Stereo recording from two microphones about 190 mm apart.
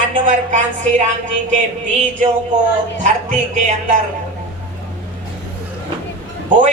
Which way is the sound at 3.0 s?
40° right (ahead or behind).